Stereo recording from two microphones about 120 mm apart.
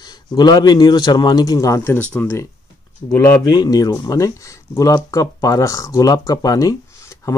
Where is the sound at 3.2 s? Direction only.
30° left (ahead or behind).